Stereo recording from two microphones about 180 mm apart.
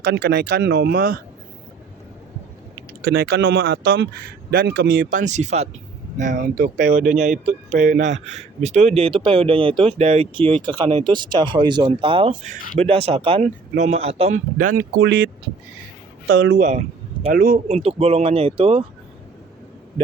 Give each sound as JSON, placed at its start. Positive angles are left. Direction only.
{"t": 0.0, "sound": "speech", "side_deg": -75}
{"t": 3.0, "sound": "speech", "side_deg": -60}
{"t": 4.5, "sound": "speech", "side_deg": -65}
{"t": 5.1, "sound": "speech", "side_deg": -40}
{"t": 15.0, "sound": "speech", "side_deg": -90}
{"t": 16.6, "sound": "speech", "side_deg": -45}
{"t": 17.7, "sound": "speech", "side_deg": -35}